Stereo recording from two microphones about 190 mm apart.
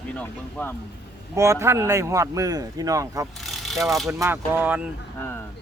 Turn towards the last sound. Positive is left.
turn(degrees=-10)  # may be behind; listen again after turning